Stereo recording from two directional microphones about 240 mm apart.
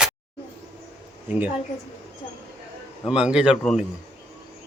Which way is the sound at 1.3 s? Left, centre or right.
Centre.